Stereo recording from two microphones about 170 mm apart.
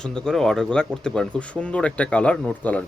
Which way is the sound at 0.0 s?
5° left (ahead or behind).